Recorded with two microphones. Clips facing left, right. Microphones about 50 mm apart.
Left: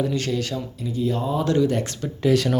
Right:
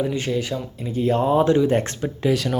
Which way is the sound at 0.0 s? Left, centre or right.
Centre.